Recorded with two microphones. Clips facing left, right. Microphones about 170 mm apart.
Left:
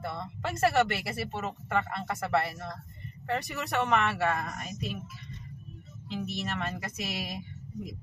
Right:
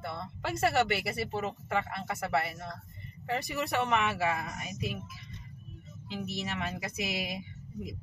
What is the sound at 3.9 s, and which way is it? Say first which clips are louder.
Speech: left 2 dB; 5° right (ahead or behind).